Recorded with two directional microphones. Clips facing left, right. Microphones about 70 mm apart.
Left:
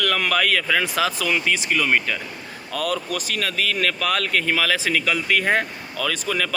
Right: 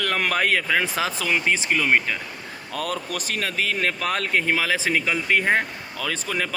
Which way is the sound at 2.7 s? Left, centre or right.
Right.